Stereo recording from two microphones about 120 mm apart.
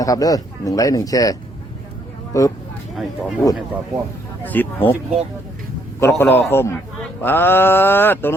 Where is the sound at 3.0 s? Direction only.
Centre (ahead or behind).